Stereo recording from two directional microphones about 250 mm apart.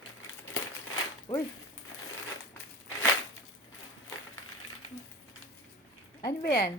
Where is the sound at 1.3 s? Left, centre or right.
Centre.